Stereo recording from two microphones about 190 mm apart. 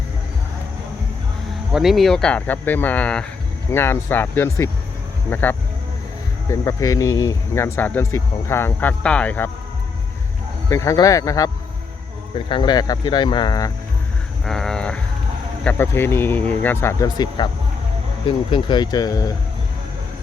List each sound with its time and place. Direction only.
1.7 s speech: centre (ahead or behind)
10.7 s speech: 15° left (ahead or behind)
14.4 s speech: centre (ahead or behind); by 17.5 s 25° left (ahead or behind)
18.5 s speech: 25° left (ahead or behind)